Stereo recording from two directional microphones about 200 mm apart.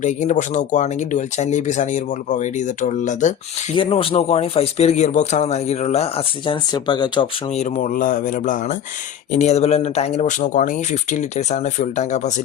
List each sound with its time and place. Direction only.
0.0 s speech: 35° left (ahead or behind)
3.8 s speech: 25° left (ahead or behind)